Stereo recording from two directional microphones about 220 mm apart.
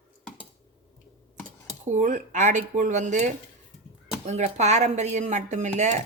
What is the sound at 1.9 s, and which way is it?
Speech, 35° right (ahead or behind).